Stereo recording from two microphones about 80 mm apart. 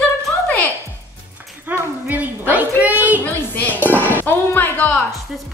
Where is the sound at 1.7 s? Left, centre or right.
Centre.